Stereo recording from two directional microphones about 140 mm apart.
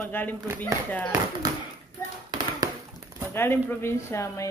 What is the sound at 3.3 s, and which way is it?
Speech, 15° left (ahead or behind).